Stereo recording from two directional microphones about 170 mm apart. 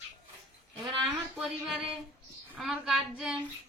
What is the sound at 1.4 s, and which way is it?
A woman's voice, 5° right (ahead or behind).